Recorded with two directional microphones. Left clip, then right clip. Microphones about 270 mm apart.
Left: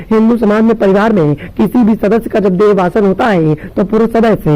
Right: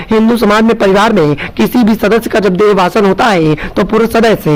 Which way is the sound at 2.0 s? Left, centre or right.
Centre.